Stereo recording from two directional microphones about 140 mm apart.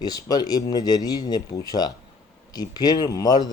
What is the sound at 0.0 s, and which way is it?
Speech, 25° left (ahead or behind).